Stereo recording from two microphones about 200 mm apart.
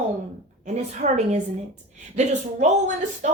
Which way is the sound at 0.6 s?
40° right (ahead or behind).